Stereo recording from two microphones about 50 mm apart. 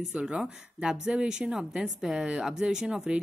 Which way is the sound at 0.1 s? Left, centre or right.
Centre.